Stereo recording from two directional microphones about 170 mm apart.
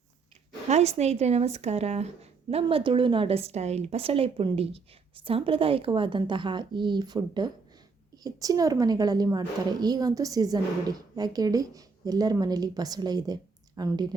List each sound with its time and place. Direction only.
0.7 s a woman's voice: 40° right (ahead or behind); by 14.2 s 25° right (ahead or behind)